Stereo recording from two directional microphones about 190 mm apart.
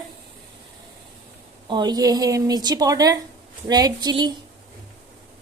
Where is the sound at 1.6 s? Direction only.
25° right (ahead or behind).